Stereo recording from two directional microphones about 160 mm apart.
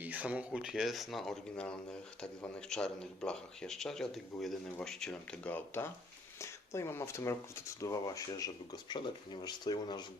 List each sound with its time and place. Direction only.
0.0 s speech: 10° right (ahead or behind); by 10.0 s 25° left (ahead or behind)